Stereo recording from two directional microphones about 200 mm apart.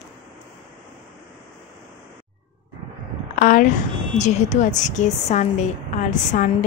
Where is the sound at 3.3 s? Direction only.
40° left (ahead or behind).